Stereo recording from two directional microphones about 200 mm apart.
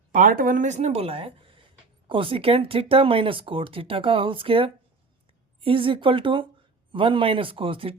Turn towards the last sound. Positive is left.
turn(degrees=-25)  # may be behind; listen again after turning